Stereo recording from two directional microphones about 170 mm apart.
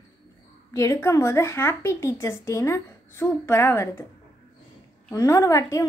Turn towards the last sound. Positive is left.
turn(degrees=20)  # may be behind; listen again after turning